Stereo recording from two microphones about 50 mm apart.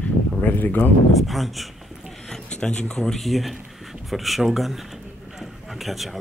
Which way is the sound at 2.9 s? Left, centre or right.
Centre.